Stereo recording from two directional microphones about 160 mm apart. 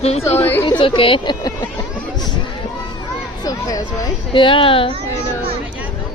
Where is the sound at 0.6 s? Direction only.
30° left (ahead or behind).